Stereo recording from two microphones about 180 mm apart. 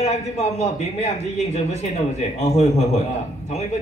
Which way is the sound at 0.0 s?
40° left (ahead or behind).